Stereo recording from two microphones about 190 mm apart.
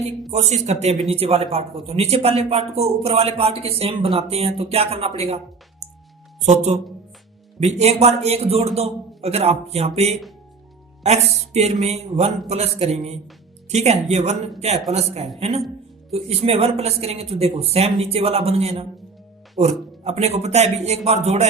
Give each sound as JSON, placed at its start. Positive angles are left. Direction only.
{"t": 0.3, "sound": "speech", "side_deg": -35}
{"t": 6.4, "sound": "speech", "side_deg": -35}